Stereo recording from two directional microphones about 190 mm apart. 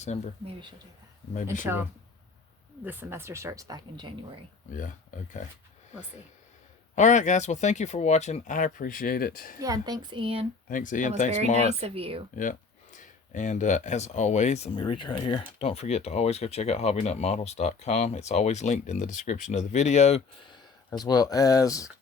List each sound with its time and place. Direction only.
1.6 s speech: 10° right (ahead or behind)
4.7 s speech: 45° left (ahead or behind)
6.9 s speech: 40° left (ahead or behind)
9.6 s speech: 20° right (ahead or behind)
10.7 s speech: 45° left (ahead or behind)
11.6 s speech: 30° right (ahead or behind)
12.4 s speech: 45° left (ahead or behind)
14.8 s speech: 25° left (ahead or behind)
21.0 s speech: 20° left (ahead or behind)